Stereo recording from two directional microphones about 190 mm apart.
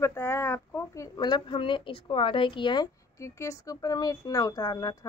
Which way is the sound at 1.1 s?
25° left (ahead or behind).